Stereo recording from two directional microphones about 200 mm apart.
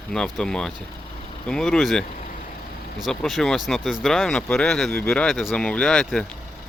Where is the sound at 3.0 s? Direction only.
Centre (ahead or behind).